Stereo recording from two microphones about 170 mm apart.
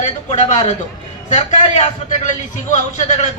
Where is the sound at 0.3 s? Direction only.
40° left (ahead or behind).